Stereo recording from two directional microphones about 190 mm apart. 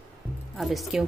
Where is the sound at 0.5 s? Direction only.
Centre (ahead or behind).